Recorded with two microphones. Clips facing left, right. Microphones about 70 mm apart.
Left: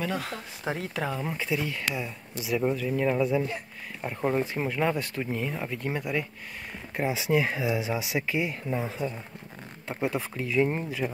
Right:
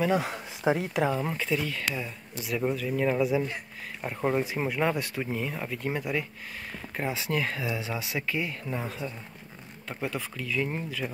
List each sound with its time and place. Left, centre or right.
0.0 s speech: centre
1.3 s speech: centre
9.8 s speech: centre